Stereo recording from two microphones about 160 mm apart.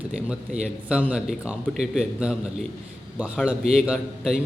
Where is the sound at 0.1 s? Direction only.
5° right (ahead or behind).